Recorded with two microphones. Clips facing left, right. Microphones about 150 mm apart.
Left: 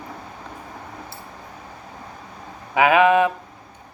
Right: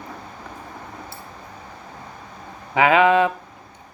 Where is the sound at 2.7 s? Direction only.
15° left (ahead or behind).